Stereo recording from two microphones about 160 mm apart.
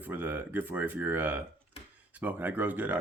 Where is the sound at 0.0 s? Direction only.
10° right (ahead or behind).